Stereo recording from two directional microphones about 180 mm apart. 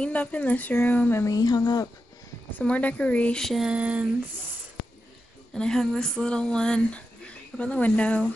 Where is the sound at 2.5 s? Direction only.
10° left (ahead or behind); by 4.0 s 5° right (ahead or behind).